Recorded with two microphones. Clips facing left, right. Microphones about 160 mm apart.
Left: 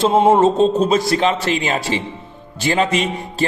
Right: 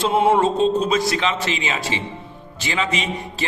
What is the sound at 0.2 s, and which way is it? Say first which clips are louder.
Speech: left 3 dB; 25° left (ahead or behind).